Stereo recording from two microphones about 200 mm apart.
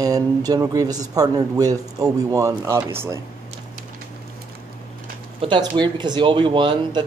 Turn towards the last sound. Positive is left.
turn(degrees=-25)  # may be behind; listen again after turning